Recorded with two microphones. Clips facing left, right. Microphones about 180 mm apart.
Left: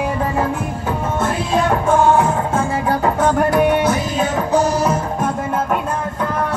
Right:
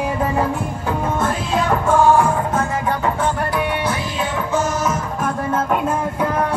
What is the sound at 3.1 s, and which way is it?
Music, 45° left (ahead or behind).